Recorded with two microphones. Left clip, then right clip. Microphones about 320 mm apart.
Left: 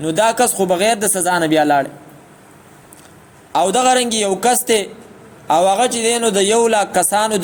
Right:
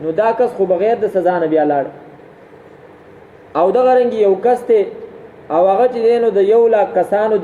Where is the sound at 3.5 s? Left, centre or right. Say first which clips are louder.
Right 2 dB; left.